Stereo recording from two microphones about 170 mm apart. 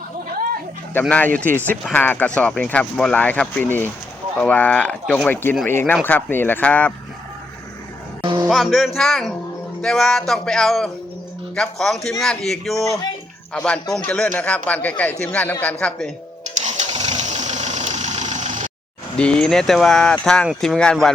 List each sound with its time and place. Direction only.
0.9 s speech: 10° left (ahead or behind)
8.2 s cattle: 30° right (ahead or behind)
8.4 s speech: centre (ahead or behind)
12.8 s speech: 20° left (ahead or behind)
13.5 s speech: 5° left (ahead or behind)
16.6 s vehicle: 40° right (ahead or behind)
19.1 s speech: 5° left (ahead or behind)